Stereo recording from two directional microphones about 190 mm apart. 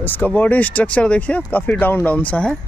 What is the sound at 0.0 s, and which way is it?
Speech, 10° left (ahead or behind).